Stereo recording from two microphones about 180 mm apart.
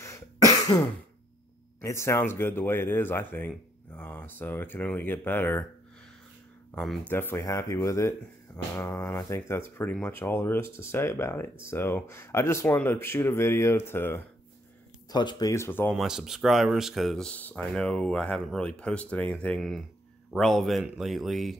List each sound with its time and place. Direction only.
0.0 s cough: 15° left (ahead or behind)
1.8 s speech: 15° left (ahead or behind)
6.7 s speech: 5° left (ahead or behind)
15.0 s speech: 25° left (ahead or behind)
15.9 s speech: centre (ahead or behind)